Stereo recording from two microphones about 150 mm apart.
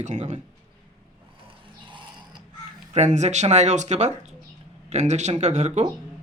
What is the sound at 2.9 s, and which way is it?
Speech, 50° right (ahead or behind).